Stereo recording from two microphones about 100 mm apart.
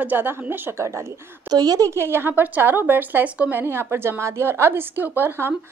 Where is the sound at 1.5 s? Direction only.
40° right (ahead or behind); by 5.5 s 25° right (ahead or behind).